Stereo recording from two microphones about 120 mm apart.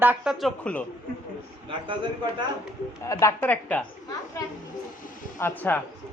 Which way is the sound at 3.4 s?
10° left (ahead or behind).